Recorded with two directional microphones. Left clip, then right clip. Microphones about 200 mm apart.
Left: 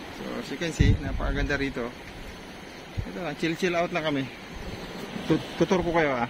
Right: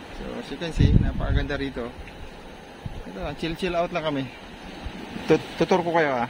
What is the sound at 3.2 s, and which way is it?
Speech, 10° right (ahead or behind).